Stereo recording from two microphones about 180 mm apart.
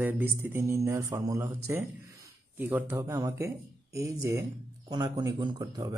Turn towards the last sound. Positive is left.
turn(degrees=-20)  # may be behind; listen again after turning